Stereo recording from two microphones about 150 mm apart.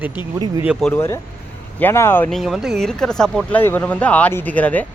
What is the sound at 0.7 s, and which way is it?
Speech, 5° left (ahead or behind).